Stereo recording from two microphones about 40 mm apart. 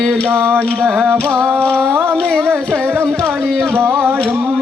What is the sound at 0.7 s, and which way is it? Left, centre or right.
Music, right.